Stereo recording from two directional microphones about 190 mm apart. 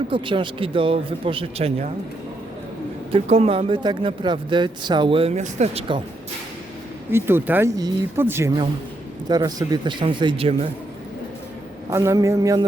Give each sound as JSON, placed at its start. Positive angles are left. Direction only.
{"t": 0.1, "sound": "speech", "side_deg": -25}
{"t": 3.1, "sound": "speech", "side_deg": -30}
{"t": 7.1, "sound": "a woman's voice", "side_deg": -10}
{"t": 11.9, "sound": "a woman's voice", "side_deg": -15}